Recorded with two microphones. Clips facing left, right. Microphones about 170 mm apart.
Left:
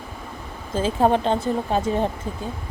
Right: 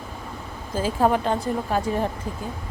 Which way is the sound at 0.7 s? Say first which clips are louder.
Left 2 dB; 25° left (ahead or behind).